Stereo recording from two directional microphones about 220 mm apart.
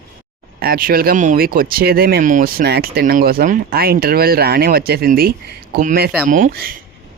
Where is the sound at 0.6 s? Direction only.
40° right (ahead or behind).